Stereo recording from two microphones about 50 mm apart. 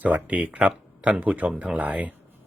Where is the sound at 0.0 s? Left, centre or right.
Right.